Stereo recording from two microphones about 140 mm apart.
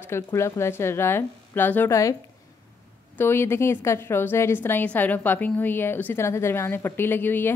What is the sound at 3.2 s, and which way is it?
A woman's voice, 15° left (ahead or behind).